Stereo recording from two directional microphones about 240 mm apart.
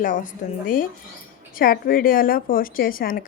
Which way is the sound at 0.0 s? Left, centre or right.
Left.